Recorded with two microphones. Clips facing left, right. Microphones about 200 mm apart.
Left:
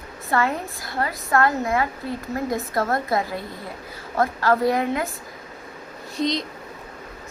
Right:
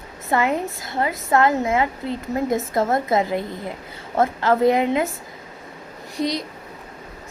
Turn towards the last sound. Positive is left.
turn(degrees=-10)  # may be behind; listen again after turning